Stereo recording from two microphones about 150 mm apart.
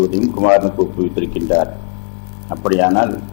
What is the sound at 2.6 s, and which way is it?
Speech, 15° left (ahead or behind).